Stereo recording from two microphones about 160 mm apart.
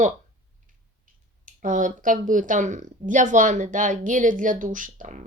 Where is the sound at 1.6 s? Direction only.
55° right (ahead or behind).